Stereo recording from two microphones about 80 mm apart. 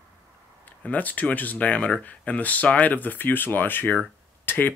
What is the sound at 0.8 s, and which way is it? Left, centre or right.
Speech, centre.